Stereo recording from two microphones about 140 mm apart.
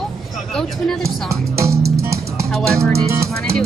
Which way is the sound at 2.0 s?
20° right (ahead or behind).